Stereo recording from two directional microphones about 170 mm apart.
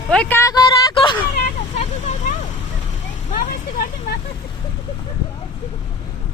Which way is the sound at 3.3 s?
50° left (ahead or behind).